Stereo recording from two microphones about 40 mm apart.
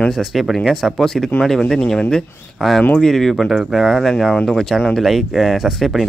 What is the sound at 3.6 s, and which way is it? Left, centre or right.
Speech, centre.